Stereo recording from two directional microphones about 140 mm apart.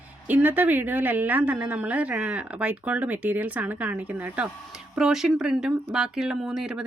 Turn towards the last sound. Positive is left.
turn(degrees=-5)  # may be behind; listen again after turning